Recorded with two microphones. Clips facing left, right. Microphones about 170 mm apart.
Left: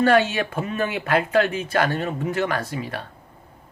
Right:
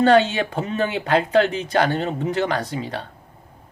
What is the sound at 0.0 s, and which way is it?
Speech, 20° right (ahead or behind).